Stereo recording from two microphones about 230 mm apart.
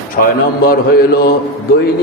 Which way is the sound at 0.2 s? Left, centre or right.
Left.